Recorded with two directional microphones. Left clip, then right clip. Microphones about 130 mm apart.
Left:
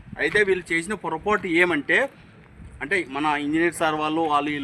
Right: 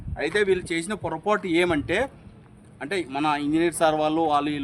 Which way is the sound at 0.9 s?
50° right (ahead or behind).